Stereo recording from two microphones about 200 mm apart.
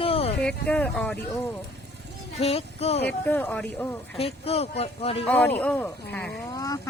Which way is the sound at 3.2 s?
10° left (ahead or behind).